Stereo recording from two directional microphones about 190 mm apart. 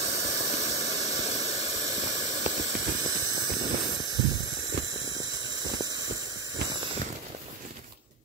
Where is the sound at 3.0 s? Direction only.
20° right (ahead or behind).